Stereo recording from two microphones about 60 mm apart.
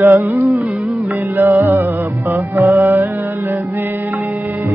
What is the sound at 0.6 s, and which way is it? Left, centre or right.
Music, centre.